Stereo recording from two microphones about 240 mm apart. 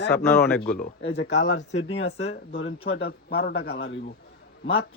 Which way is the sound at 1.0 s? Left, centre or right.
Left.